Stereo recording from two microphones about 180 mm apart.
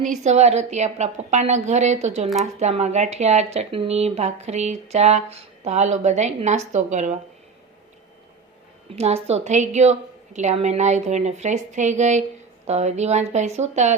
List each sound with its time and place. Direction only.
0.0 s speech: 40° right (ahead or behind)
9.0 s speech: 35° right (ahead or behind)